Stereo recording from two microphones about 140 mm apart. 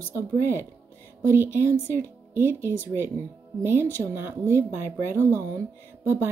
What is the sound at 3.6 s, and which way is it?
A woman's voice, 15° right (ahead or behind).